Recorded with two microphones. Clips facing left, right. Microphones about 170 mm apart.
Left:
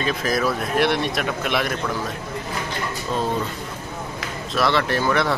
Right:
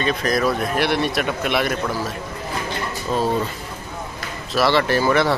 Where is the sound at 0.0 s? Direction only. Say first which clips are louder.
Right 2 dB; centre (ahead or behind).